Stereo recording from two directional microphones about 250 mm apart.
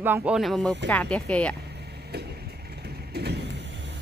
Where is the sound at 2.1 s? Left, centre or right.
Right.